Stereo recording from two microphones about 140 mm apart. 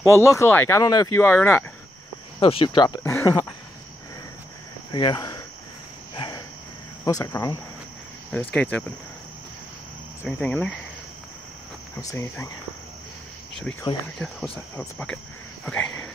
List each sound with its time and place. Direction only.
0.1 s speech: 20° left (ahead or behind)
1.2 s speech: 15° left (ahead or behind)
2.4 s speech: 40° left (ahead or behind)
3.0 s speech: 20° left (ahead or behind)
4.9 s speech: 30° left (ahead or behind)
6.1 s cricket: 35° left (ahead or behind)
7.1 s speech: 25° left (ahead or behind)
8.3 s speech: 10° left (ahead or behind)
10.2 s speech: 5° left (ahead or behind)
12.0 s speech: 20° left (ahead or behind)
14.1 s speech: 5° left (ahead or behind)
15.6 s a sound: 5° left (ahead or behind)